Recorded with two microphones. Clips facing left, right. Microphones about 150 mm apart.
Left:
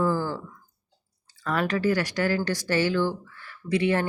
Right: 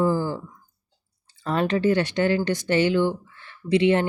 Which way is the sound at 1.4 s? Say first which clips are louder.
Right 3 dB; 25° right (ahead or behind).